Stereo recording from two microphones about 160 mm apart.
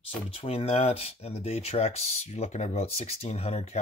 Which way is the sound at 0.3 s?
35° left (ahead or behind).